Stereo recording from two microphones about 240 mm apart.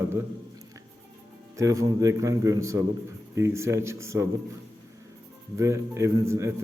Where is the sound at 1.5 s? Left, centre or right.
Centre.